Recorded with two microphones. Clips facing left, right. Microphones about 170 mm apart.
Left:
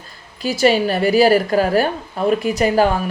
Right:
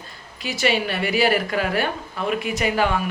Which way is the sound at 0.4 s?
35° left (ahead or behind).